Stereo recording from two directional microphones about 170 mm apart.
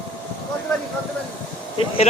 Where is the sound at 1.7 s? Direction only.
35° left (ahead or behind).